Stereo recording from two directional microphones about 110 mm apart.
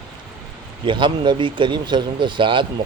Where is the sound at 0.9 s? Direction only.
45° right (ahead or behind).